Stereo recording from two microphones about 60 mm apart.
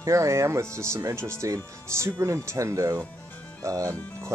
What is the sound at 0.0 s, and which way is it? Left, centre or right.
Speech, right.